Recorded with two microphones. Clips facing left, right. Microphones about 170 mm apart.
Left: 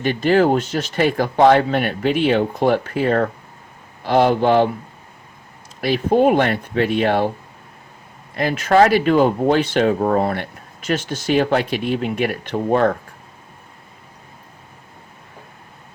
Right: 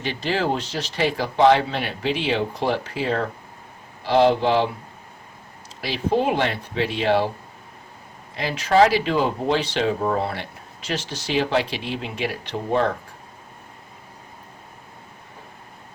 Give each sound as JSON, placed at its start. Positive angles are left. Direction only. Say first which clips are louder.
{"t": 0.0, "sound": "speech", "louder": "left 9 dB", "side_deg": 50}
{"t": 5.8, "sound": "speech", "louder": "left 6 dB", "side_deg": 50}
{"t": 8.4, "sound": "speech", "louder": "left 3 dB", "side_deg": 50}